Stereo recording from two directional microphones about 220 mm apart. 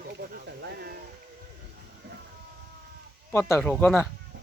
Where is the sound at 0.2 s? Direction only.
45° right (ahead or behind).